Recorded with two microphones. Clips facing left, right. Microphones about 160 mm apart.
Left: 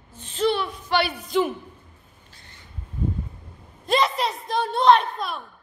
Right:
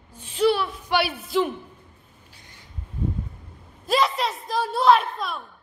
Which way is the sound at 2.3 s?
10° right (ahead or behind).